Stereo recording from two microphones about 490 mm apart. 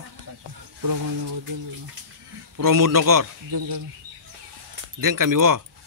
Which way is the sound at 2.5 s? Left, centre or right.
Right.